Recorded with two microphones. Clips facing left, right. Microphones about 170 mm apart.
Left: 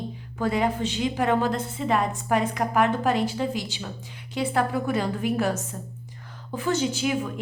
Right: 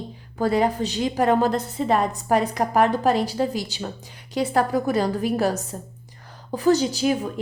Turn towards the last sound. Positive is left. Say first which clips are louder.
# right 3 dB
turn(degrees=-35)  # may be behind; listen again after turning